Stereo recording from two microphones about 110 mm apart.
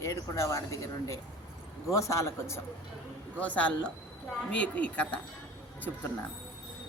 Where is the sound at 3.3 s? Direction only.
15° left (ahead or behind).